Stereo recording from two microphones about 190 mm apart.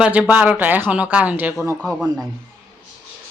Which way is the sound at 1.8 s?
Centre (ahead or behind).